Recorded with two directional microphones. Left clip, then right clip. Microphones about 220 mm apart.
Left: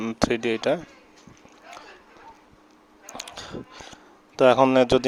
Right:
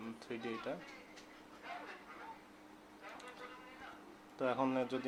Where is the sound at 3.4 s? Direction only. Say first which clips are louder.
Left 13 dB; 50° left (ahead or behind).